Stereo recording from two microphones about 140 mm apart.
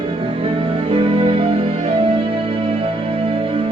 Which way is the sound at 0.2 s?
40° right (ahead or behind).